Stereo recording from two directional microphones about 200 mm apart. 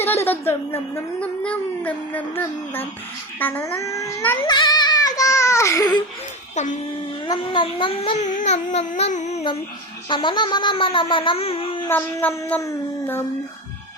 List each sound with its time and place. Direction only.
0.0 s speech: 10° left (ahead or behind)
4.4 s baby cry: 20° left (ahead or behind)
7.3 s speech: 25° left (ahead or behind)
10.1 s a sound: 25° left (ahead or behind)
11.9 s speech: 10° left (ahead or behind)